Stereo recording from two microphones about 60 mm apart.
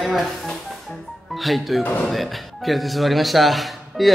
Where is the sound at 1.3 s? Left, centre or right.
Centre.